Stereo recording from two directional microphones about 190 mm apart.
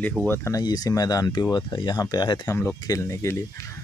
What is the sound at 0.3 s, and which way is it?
Speech, 15° left (ahead or behind).